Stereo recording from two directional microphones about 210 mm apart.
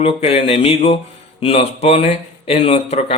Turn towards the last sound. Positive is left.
turn(degrees=30)  # may be behind; listen again after turning